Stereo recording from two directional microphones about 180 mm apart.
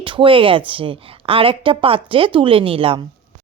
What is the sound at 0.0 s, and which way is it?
Speech, 30° right (ahead or behind).